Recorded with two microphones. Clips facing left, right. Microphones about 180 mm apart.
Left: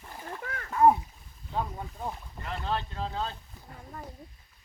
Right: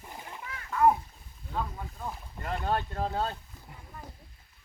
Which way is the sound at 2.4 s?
45° right (ahead or behind).